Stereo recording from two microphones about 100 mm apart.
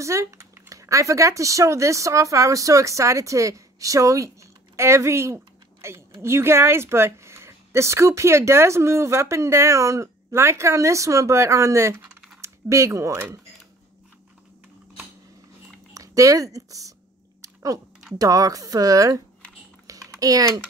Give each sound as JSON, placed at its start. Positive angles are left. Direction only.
{"t": 0.0, "sound": "speech", "side_deg": -30}
{"t": 15.9, "sound": "a sound", "side_deg": -35}
{"t": 18.1, "sound": "speech", "side_deg": -40}
{"t": 19.9, "sound": "typing", "side_deg": -35}